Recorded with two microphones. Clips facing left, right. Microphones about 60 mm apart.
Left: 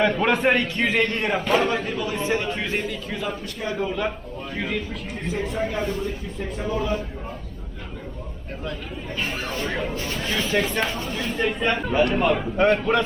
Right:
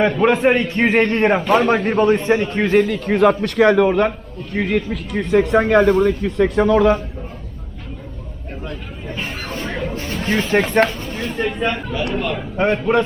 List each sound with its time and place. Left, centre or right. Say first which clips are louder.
0.2 s a man's voice: right 5 dB; centre
0.7 s a man's voice: right 6 dB; right
1.6 s a man's voice: right 10 dB; right
2.8 s a man's voice: right 14 dB; right
9.6 s a sound: right 3 dB; centre
9.9 s a sound: right 3 dB; right
10.5 s a man's voice: right 6 dB; right
11.3 s speech: right 2 dB; centre
11.9 s speech: left 2 dB; centre
12.5 s a man's voice: right 4 dB; centre